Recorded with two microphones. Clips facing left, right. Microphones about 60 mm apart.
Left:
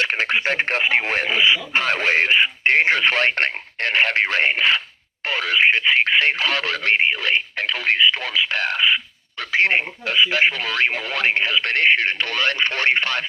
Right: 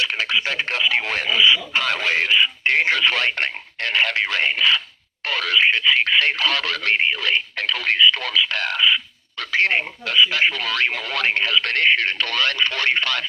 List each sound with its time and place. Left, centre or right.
0.0 s speech: left